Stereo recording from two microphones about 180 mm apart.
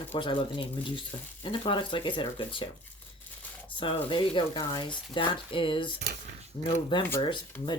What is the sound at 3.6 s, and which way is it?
Speech, 30° left (ahead or behind).